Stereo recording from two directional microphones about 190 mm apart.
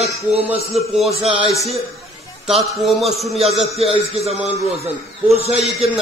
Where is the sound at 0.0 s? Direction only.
35° right (ahead or behind).